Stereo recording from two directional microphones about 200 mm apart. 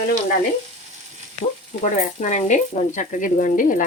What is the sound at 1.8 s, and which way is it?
Frying, 35° left (ahead or behind).